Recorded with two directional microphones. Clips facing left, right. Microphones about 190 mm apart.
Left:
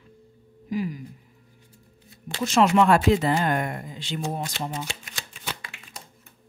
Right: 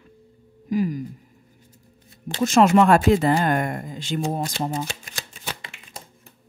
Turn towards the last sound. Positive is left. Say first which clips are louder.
# right 2 dB
turn(degrees=-30)  # may be behind; listen again after turning